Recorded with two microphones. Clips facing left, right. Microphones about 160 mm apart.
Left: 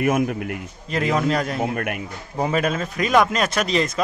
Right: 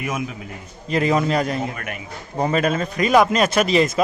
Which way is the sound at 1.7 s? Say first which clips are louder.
Left 6 dB; 55° left (ahead or behind).